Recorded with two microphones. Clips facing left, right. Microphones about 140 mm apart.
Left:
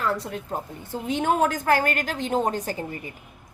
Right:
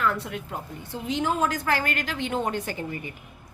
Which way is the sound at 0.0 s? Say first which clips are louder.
Even; 35° left (ahead or behind).